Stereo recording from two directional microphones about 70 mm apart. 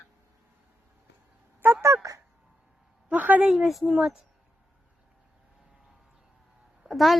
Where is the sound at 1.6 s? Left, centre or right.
Right.